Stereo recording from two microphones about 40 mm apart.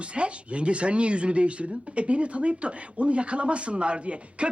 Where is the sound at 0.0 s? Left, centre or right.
Right.